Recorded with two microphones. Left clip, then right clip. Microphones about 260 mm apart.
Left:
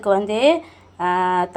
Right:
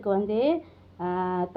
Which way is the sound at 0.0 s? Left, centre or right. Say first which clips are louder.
Left 8 dB; centre.